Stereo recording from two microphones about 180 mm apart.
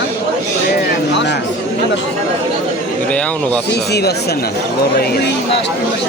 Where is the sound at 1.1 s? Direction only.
75° left (ahead or behind).